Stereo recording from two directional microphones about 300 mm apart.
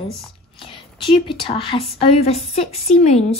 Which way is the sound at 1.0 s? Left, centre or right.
Centre.